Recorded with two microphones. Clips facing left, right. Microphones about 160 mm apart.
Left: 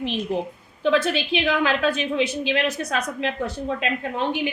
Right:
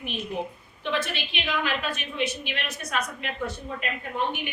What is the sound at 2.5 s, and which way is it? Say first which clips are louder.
A woman's voice: left 9 dB; 90° left.